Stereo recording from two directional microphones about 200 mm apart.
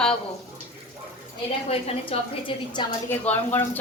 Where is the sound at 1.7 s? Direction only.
30° left (ahead or behind).